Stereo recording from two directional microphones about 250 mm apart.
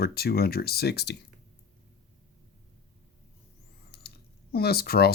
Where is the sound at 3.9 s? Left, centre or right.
Left.